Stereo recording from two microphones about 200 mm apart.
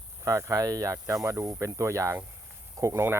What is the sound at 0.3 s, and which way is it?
Speech, 15° right (ahead or behind).